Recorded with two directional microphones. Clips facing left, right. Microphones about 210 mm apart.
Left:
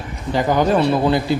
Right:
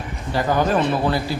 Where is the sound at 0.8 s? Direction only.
20° left (ahead or behind).